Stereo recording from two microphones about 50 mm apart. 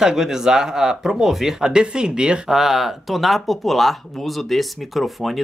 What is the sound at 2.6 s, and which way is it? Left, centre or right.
Speech, centre.